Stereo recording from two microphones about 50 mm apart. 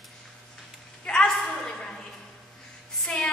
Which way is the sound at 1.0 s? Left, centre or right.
Centre.